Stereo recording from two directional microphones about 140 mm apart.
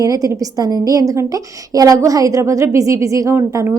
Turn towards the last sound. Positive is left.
turn(degrees=-20)  # may be behind; listen again after turning